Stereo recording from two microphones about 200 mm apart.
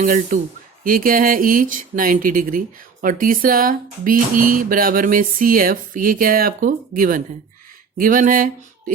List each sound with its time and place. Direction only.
0.0 s speech: 40° right (ahead or behind)